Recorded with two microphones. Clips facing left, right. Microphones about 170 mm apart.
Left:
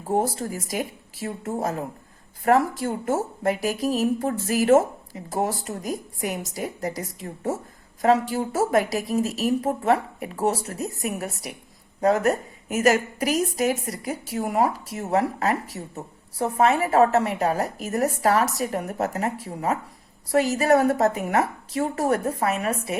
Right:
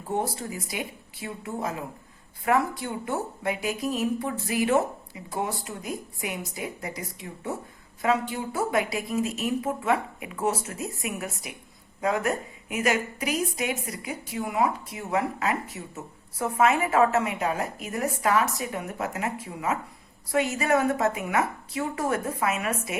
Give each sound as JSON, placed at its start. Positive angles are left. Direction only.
{"t": 0.1, "sound": "a woman's voice", "side_deg": 40}